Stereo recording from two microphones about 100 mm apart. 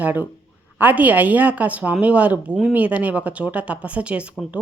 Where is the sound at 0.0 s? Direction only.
15° right (ahead or behind).